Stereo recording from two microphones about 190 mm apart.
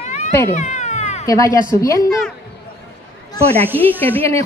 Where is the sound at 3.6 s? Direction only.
10° right (ahead or behind).